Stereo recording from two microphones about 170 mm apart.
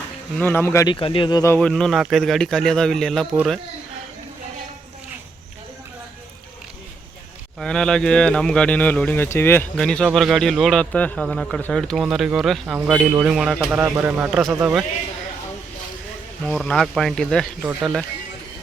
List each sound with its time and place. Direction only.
0.3 s speech: 15° left (ahead or behind)
0.9 s speech: 30° left (ahead or behind)
1.5 s a man's voice: 5° left (ahead or behind)
7.6 s a man's voice: 5° left (ahead or behind)
9.7 s a man's voice: 5° left (ahead or behind)
14.3 s a man's voice: centre (ahead or behind)
16.4 s a man's voice: 5° left (ahead or behind)
17.6 s a man's voice: 10° right (ahead or behind)